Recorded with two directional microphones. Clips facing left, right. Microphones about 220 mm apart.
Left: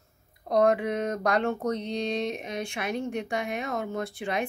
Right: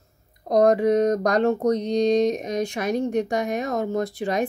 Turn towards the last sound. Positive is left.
turn(degrees=-40)  # may be behind; listen again after turning